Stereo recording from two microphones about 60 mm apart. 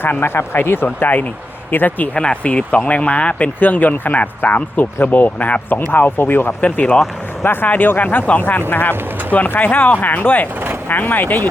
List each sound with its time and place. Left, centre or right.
0.0 s speech: left
2.1 s speech: centre
5.9 s speech: left